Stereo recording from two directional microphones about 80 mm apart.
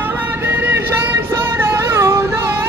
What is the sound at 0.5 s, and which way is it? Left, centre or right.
Music, right.